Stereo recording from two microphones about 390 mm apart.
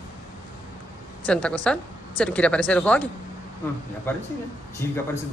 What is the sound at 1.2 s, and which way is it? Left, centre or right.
Speech, centre.